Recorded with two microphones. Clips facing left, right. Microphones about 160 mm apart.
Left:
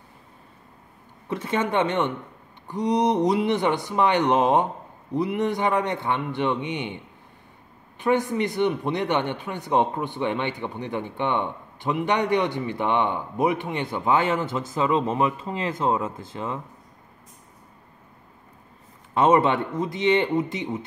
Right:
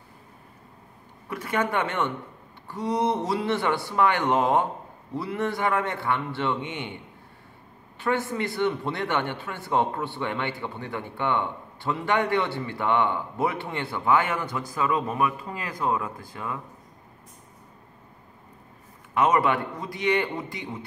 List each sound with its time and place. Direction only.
1.3 s a man's voice: 25° left (ahead or behind)
8.0 s speech: 20° left (ahead or behind)
19.1 s speech: 25° left (ahead or behind)